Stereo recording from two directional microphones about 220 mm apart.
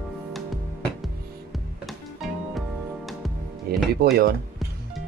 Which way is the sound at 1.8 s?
Centre (ahead or behind).